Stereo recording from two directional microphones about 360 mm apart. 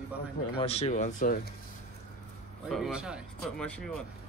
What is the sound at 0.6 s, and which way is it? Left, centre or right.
Speech, centre.